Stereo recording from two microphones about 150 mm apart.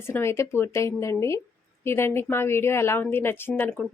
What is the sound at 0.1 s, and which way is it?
A woman's voice, 15° left (ahead or behind).